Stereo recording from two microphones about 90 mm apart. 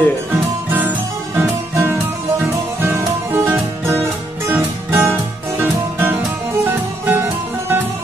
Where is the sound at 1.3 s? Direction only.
25° right (ahead or behind).